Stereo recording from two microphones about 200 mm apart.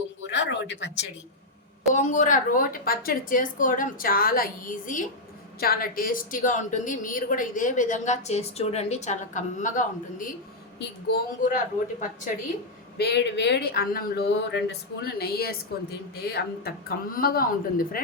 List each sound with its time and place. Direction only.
0.3 s a sound: 60° left (ahead or behind)
1.9 s a woman's voice: 40° left (ahead or behind)
10.8 s speech: 55° left (ahead or behind)
13.0 s speech: 60° left (ahead or behind)